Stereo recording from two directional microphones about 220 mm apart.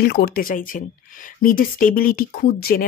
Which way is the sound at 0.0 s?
45° left (ahead or behind).